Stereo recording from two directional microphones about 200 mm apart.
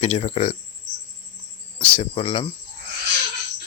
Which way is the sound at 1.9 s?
30° left (ahead or behind).